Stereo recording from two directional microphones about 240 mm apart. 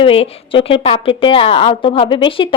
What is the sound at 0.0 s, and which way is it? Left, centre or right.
Speech, left.